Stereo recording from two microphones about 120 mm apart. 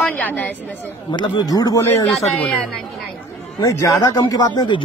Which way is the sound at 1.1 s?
35° left (ahead or behind).